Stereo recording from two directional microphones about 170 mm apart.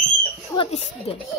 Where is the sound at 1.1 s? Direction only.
35° left (ahead or behind).